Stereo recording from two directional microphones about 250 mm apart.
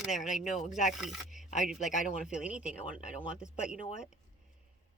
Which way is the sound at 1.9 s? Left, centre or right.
Left.